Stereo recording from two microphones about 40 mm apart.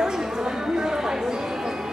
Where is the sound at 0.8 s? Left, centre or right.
Centre.